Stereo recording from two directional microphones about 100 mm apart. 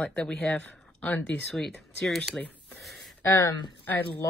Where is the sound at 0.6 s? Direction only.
20° left (ahead or behind).